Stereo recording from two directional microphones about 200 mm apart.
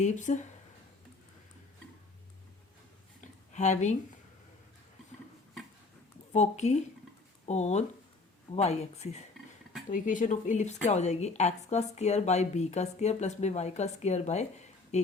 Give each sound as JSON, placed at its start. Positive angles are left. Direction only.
{"t": 0.0, "sound": "speech", "side_deg": 35}
{"t": 3.2, "sound": "a sound", "side_deg": 35}
{"t": 6.3, "sound": "speech", "side_deg": 35}